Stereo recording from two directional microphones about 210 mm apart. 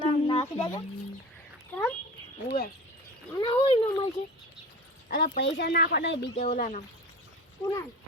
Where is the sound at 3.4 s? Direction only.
25° left (ahead or behind).